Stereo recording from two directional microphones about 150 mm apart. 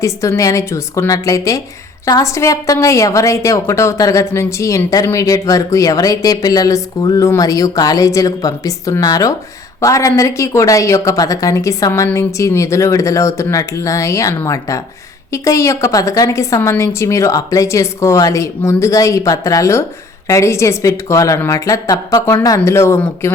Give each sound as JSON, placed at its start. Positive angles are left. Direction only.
{"t": 0.0, "sound": "a woman's voice", "side_deg": 20}